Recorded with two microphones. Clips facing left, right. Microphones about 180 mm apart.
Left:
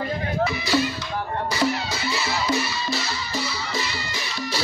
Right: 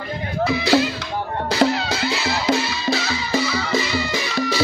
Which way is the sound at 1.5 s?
90° right.